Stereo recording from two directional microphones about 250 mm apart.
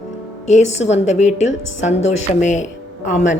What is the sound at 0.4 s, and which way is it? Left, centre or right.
A woman's voice, left.